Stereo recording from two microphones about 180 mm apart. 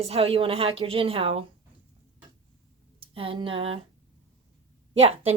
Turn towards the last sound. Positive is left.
turn(degrees=-35)  # may be behind; listen again after turning